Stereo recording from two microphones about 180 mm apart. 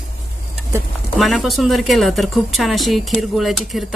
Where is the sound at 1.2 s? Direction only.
Centre (ahead or behind).